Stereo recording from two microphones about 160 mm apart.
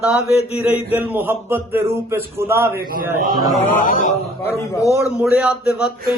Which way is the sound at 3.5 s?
60° left (ahead or behind).